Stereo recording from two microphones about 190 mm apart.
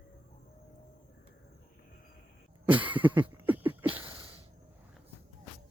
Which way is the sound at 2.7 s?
10° right (ahead or behind).